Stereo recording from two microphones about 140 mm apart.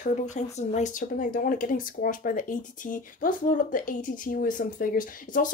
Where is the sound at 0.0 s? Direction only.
55° left (ahead or behind).